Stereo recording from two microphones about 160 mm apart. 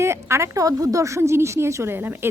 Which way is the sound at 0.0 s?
15° right (ahead or behind).